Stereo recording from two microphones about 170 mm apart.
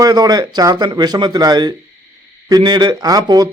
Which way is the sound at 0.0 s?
25° right (ahead or behind).